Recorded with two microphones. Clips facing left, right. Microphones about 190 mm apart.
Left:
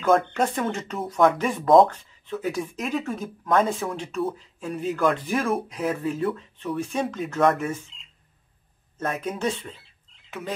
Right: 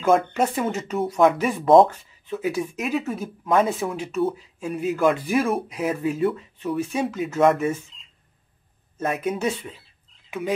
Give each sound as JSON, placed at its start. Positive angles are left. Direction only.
{"t": 0.0, "sound": "speech", "side_deg": -5}
{"t": 8.9, "sound": "speech", "side_deg": -10}